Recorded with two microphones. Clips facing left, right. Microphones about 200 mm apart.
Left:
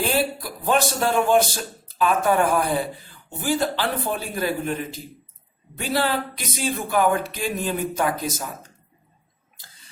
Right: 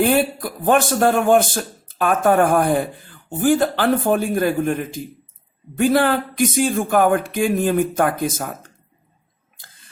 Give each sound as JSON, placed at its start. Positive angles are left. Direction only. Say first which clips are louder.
{"t": 0.0, "sound": "speech", "louder": "right 6 dB", "side_deg": -55}